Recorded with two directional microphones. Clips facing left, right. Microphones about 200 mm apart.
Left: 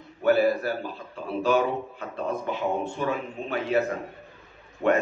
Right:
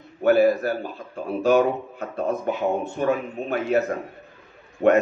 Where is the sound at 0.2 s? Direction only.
45° right (ahead or behind).